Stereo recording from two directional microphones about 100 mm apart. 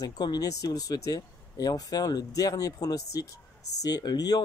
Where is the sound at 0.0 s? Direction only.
40° left (ahead or behind).